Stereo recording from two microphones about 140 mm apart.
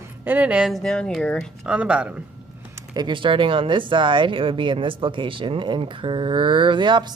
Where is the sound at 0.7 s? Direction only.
5° left (ahead or behind).